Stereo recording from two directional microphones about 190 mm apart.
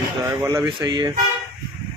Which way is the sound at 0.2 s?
15° right (ahead or behind).